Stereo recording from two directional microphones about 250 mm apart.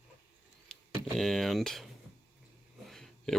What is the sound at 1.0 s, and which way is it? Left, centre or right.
Speech, centre.